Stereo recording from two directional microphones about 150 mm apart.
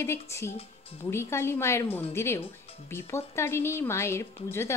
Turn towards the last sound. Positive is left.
turn(degrees=15)  # may be behind; listen again after turning